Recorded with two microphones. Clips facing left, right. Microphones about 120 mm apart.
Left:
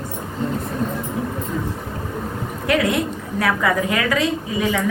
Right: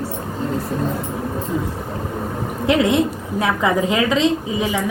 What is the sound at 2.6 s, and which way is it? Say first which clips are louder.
A woman's voice: right 3 dB; 20° right (ahead or behind).